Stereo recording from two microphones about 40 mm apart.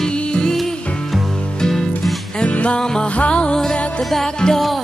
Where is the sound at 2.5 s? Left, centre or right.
Left.